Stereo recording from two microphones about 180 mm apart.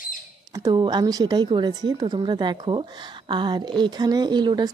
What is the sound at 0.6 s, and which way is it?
A woman's voice, 20° right (ahead or behind).